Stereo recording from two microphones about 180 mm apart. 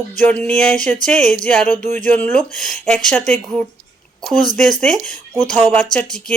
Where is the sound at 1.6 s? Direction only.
40° right (ahead or behind).